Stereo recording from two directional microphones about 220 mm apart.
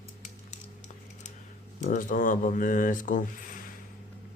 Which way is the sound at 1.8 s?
35° left (ahead or behind).